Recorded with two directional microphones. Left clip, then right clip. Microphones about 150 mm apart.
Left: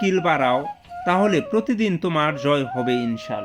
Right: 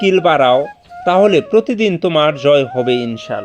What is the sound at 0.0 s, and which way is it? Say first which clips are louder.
Speech: right 8 dB; 10° right (ahead or behind).